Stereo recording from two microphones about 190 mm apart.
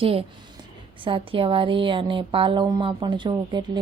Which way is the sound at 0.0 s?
30° right (ahead or behind).